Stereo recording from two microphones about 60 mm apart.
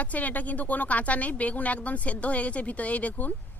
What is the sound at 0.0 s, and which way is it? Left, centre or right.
A woman's voice, left.